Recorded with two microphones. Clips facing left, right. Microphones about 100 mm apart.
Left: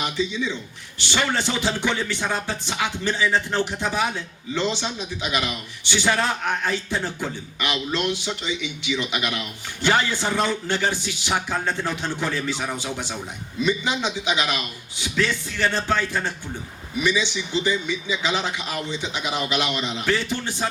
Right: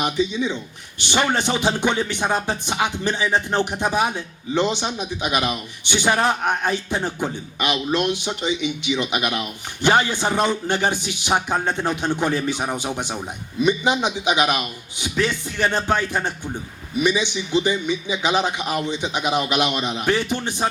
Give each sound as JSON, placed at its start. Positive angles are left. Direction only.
{"t": 0.0, "sound": "a man's voice", "side_deg": -20}